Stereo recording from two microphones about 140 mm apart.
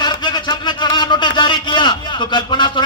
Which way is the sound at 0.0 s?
30° left (ahead or behind).